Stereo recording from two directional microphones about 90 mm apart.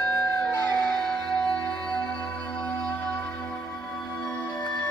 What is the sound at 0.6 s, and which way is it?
Music, 25° left (ahead or behind).